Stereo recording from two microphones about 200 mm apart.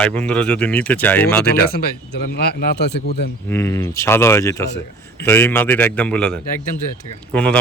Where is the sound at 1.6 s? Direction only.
55° left (ahead or behind).